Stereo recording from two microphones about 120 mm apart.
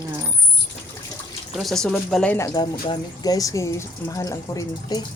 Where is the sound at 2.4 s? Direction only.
30° left (ahead or behind).